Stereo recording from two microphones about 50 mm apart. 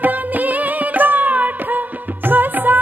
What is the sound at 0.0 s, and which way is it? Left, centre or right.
Music, right.